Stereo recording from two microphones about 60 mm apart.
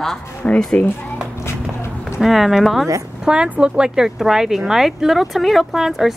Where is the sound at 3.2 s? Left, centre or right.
Centre.